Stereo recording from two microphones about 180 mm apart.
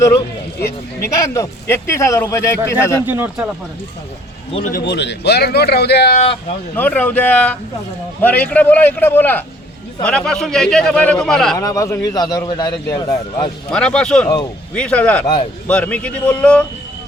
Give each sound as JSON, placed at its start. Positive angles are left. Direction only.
{"t": 1.3, "sound": "speech", "side_deg": 15}
{"t": 3.1, "sound": "speech", "side_deg": -10}
{"t": 4.6, "sound": "speech", "side_deg": 60}
{"t": 6.7, "sound": "speech", "side_deg": 10}
{"t": 11.5, "sound": "a man's voice", "side_deg": 20}
{"t": 13.7, "sound": "speech", "side_deg": 5}